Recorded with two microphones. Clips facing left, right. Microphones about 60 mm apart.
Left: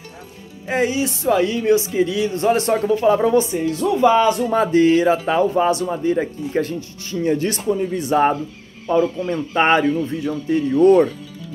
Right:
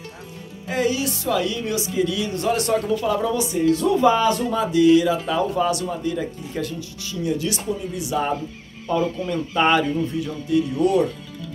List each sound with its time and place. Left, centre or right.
0.7 s speech: left
4.5 s a man's voice: left
8.8 s a man's voice: left